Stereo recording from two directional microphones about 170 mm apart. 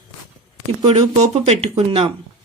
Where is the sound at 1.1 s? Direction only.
40° right (ahead or behind).